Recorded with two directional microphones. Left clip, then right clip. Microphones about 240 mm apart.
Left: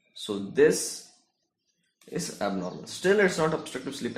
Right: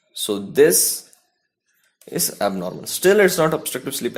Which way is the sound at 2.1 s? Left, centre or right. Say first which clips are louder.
Right 9 dB; right.